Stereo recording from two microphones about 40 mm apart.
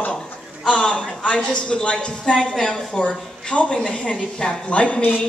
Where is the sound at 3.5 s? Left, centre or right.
Left.